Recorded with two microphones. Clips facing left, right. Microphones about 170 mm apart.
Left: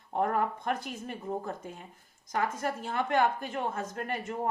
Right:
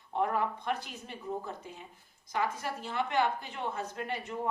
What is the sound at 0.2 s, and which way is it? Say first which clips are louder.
A woman's voice: left 2 dB; 45° left (ahead or behind).